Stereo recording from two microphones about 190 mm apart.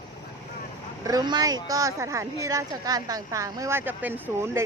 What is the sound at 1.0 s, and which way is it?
Speech, 20° right (ahead or behind).